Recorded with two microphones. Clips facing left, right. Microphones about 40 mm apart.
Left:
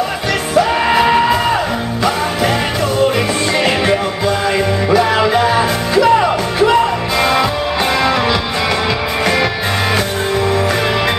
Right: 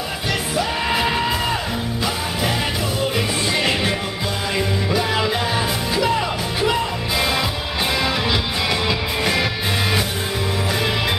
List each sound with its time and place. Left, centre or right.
0.8 s music: left
5.1 s music: left